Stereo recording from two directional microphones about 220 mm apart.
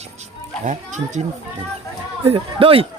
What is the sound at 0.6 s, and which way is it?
Speech, 35° right (ahead or behind).